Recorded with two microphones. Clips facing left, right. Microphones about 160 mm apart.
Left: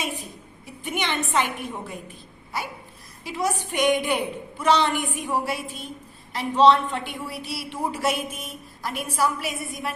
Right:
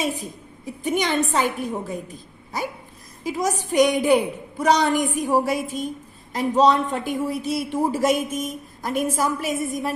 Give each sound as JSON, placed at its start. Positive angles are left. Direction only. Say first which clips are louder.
{"t": 0.0, "sound": "a woman's voice", "louder": "right 5 dB", "side_deg": -40}
{"t": 3.2, "sound": "a woman's voice", "louder": "right 3 dB", "side_deg": -40}